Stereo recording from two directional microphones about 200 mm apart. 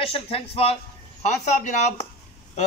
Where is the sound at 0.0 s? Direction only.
30° left (ahead or behind).